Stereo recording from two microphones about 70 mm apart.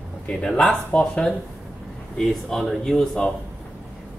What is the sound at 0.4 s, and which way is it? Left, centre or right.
Speech, centre.